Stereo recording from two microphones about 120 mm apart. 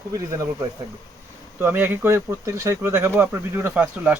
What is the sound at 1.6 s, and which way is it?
Speech, 15° right (ahead or behind).